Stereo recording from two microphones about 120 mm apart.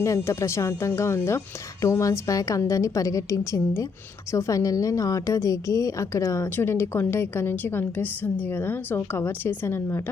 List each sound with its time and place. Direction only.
0.0 s a woman's voice: 25° left (ahead or behind)